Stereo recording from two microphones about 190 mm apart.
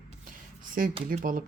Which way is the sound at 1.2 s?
45° right (ahead or behind).